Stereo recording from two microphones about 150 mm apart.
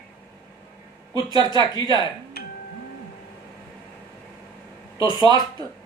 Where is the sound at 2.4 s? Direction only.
90° left.